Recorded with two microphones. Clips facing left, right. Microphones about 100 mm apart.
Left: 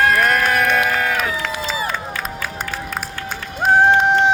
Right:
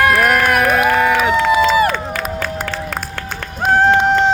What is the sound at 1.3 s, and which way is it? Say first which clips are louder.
Run: right 12 dB; 75° right (ahead or behind).